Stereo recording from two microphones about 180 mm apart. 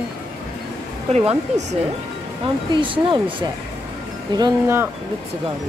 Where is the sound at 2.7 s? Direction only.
25° right (ahead or behind).